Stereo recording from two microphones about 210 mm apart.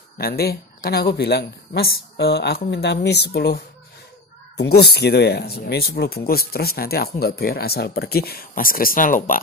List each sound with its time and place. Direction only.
0.2 s speech: 50° left (ahead or behind)